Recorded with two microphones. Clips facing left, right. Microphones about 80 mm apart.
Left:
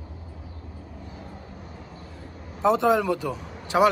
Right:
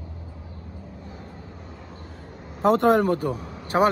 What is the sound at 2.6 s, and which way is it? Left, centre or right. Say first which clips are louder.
Speech: right 2 dB; right.